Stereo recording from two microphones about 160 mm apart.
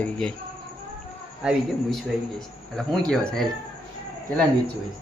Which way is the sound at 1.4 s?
Centre (ahead or behind).